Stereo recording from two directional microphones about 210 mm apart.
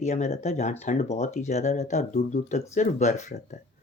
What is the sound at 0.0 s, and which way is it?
Speech, 30° left (ahead or behind).